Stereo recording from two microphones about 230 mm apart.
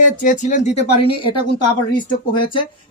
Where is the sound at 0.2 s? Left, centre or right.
Left.